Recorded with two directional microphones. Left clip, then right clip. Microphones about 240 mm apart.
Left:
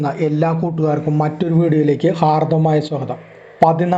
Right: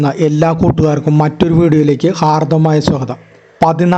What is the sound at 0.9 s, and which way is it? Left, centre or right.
Speech, right.